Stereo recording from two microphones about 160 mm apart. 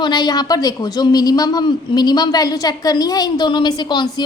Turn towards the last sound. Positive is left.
turn(degrees=25)  # may be behind; listen again after turning